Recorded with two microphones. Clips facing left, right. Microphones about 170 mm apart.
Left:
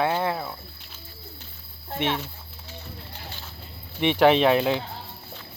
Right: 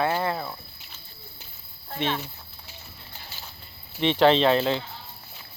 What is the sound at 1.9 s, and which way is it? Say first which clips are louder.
Speech: left 1 dB; 15° left (ahead or behind).